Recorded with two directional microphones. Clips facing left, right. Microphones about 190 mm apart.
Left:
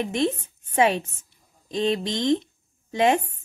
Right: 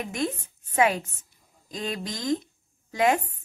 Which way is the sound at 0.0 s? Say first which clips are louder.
Left 5 dB; 25° left (ahead or behind).